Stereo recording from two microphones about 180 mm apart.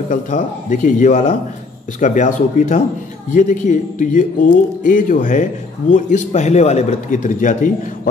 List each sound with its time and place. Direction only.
0.1 s speech: 45° left (ahead or behind)